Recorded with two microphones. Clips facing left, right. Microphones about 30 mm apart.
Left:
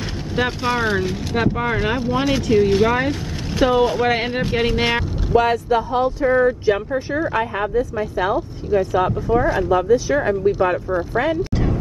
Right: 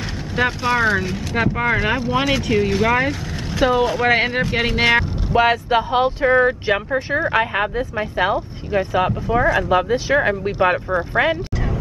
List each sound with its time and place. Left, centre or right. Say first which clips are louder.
0.4 s speech: right 2 dB; centre
4.6 s speech: right 3 dB; right
5.3 s speech: even; right
5.7 s speech: right 1 dB; right
6.6 s speech: left 1 dB; right